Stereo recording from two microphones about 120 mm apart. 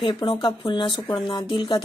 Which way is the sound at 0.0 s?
40° left (ahead or behind).